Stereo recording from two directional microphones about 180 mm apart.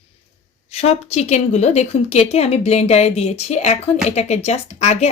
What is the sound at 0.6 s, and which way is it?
Speech, 35° left (ahead or behind).